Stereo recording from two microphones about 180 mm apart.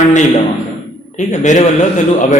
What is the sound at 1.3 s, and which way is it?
Speech, 40° left (ahead or behind).